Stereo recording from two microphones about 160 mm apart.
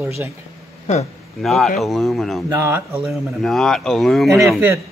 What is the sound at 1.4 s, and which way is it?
Speech, centre (ahead or behind).